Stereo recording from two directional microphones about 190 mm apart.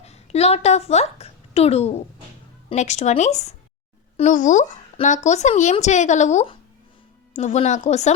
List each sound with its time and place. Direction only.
0.0 s a child's voice: 35° left (ahead or behind)